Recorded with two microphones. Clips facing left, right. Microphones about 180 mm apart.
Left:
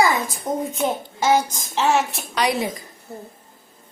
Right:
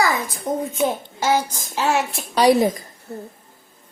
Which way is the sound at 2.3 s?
35° right (ahead or behind).